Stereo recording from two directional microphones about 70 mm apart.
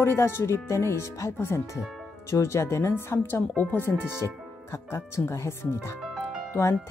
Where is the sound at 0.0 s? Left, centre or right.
Left.